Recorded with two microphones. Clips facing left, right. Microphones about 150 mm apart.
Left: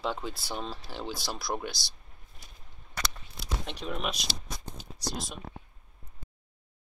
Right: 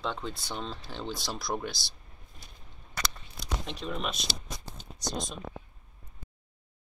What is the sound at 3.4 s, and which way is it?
Speech, centre (ahead or behind).